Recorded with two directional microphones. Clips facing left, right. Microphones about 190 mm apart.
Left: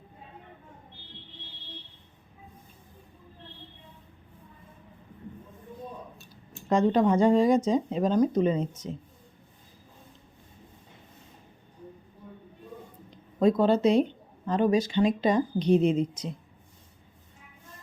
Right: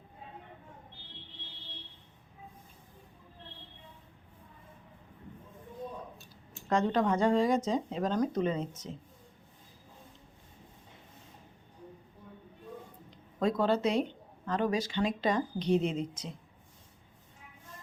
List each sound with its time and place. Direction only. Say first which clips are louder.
6.7 s speech: left 6 dB; 15° left (ahead or behind)
13.4 s speech: left 6 dB; 20° left (ahead or behind)